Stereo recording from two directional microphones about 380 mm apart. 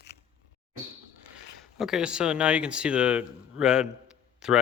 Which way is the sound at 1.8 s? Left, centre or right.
Centre.